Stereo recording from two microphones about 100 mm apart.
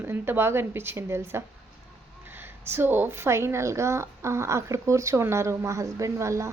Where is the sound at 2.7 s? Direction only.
20° right (ahead or behind).